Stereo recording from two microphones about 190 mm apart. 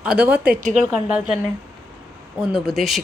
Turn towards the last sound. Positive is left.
turn(degrees=0)  # may be behind; listen again after turning